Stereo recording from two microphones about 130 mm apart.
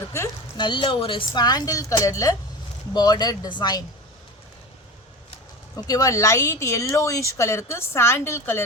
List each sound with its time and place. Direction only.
0.5 s a woman's voice: 35° left (ahead or behind)
5.7 s speech: 25° left (ahead or behind)